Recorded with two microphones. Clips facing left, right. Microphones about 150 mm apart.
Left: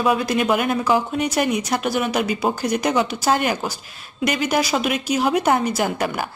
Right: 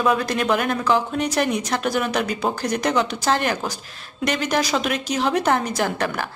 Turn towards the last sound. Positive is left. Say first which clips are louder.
# left 1 dB
turn(degrees=10)  # may be behind; listen again after turning